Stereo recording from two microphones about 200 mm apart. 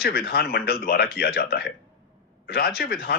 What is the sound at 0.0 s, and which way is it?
Speech, 50° left (ahead or behind).